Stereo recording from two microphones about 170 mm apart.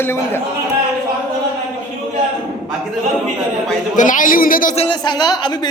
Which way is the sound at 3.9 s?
50° left (ahead or behind).